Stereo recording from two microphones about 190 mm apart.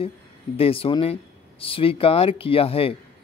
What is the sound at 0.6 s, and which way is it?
Speech, 30° left (ahead or behind).